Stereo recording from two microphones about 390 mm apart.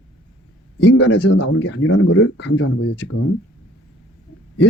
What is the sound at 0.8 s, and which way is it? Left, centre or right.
Speech, left.